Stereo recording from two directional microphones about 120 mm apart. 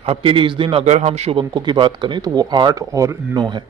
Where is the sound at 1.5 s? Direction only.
40° right (ahead or behind).